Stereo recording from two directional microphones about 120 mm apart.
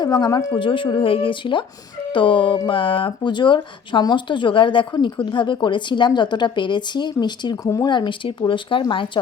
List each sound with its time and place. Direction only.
0.0 s speech: 35° left (ahead or behind)
7.5 s speech: 25° left (ahead or behind); by 9.0 s 45° left (ahead or behind)